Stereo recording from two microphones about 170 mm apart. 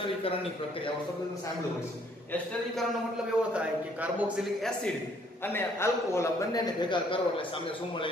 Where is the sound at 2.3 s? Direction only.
Centre (ahead or behind).